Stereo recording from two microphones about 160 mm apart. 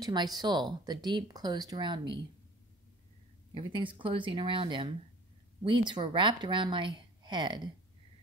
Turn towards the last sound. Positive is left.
turn(degrees=-30)  # may be behind; listen again after turning